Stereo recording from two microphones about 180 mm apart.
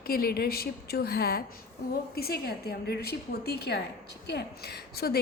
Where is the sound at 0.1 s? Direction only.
55° left (ahead or behind).